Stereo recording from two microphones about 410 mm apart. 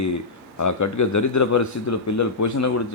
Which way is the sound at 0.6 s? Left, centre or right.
Left.